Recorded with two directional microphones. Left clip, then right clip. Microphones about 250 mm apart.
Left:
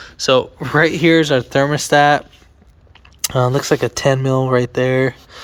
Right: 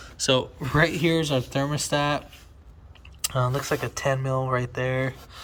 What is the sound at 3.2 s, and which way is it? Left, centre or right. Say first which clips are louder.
Speech: left 10 dB; left.